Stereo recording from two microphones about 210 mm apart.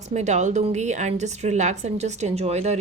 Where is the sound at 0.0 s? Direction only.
35° right (ahead or behind).